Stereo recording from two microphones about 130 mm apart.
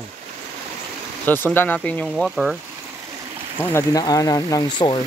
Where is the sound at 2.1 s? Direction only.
Centre (ahead or behind).